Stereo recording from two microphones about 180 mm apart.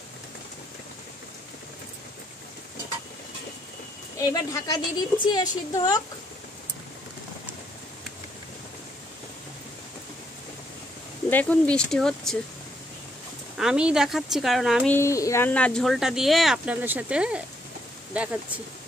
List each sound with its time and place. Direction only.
4.3 s a woman's voice: 20° left (ahead or behind)
11.2 s speech: 10° left (ahead or behind)
13.6 s speech: 5° right (ahead or behind)
14.9 s speech: 15° left (ahead or behind); by 17.4 s 5° right (ahead or behind)